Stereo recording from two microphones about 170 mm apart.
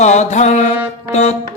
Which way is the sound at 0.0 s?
45° left (ahead or behind).